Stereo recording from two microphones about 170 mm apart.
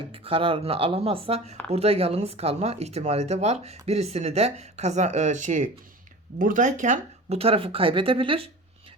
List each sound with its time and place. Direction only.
0.1 s speech: 30° right (ahead or behind)